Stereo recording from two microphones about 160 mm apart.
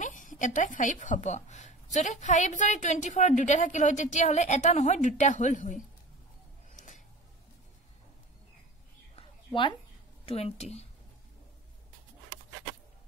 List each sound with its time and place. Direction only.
0.0 s a woman's voice: 55° left (ahead or behind)
6.7 s music: 50° left (ahead or behind)
9.1 s a sound: 30° left (ahead or behind)
10.2 s a woman's voice: 40° left (ahead or behind)